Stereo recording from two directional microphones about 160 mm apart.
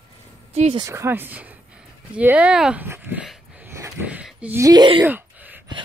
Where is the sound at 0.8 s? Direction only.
20° right (ahead or behind).